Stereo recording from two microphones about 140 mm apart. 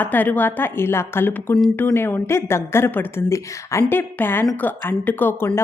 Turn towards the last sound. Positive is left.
turn(degrees=15)  # may be behind; listen again after turning